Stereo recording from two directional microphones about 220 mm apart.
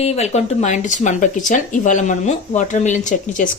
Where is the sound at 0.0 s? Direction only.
30° left (ahead or behind).